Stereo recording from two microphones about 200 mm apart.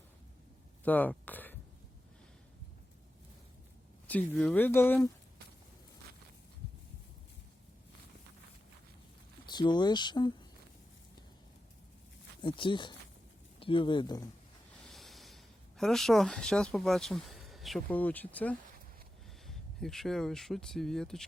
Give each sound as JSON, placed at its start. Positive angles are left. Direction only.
{"t": 0.9, "sound": "speech", "side_deg": 10}
{"t": 4.0, "sound": "speech", "side_deg": 5}
{"t": 9.5, "sound": "speech", "side_deg": 20}
{"t": 12.4, "sound": "speech", "side_deg": 25}
{"t": 14.8, "sound": "snort", "side_deg": 0}
{"t": 15.8, "sound": "speech", "side_deg": 0}